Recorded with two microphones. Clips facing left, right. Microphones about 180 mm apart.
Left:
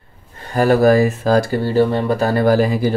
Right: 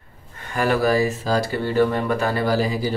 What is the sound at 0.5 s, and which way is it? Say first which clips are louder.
Speech: left 7 dB; 40° left (ahead or behind).